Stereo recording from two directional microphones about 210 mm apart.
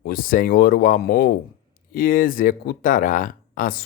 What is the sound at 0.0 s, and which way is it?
Speech, 45° left (ahead or behind).